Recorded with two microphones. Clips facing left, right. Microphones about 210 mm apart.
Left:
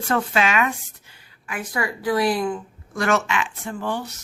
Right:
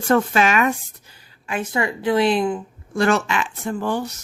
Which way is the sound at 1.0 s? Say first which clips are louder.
Right 4 dB; 30° right (ahead or behind).